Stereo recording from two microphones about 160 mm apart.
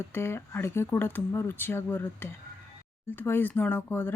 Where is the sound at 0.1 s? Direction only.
15° left (ahead or behind).